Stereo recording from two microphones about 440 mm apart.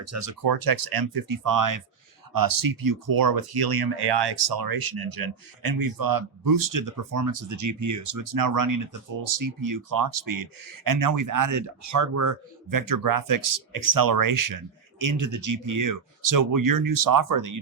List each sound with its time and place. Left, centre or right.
0.0 s speech: right
0.4 s speech: right